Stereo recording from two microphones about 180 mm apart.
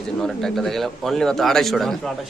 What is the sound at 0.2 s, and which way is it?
A man's voice, centre (ahead or behind).